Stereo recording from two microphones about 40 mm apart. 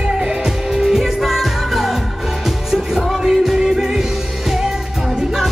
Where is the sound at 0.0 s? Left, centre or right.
Centre.